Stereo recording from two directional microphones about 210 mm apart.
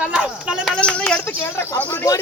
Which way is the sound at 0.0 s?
5° right (ahead or behind).